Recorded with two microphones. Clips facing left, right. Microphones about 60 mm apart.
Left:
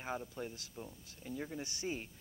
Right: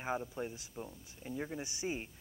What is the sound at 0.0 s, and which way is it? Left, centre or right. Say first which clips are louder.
Speech: right 4 dB; centre.